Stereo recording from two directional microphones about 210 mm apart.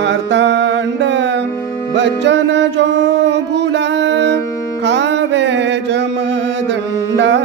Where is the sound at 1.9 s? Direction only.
55° right (ahead or behind).